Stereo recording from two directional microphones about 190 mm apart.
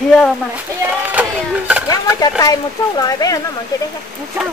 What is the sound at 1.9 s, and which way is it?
Speech, 20° left (ahead or behind).